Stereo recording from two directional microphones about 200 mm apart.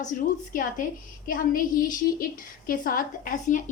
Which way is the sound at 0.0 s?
40° left (ahead or behind).